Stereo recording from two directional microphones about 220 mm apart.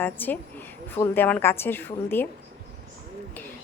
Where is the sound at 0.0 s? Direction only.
10° left (ahead or behind).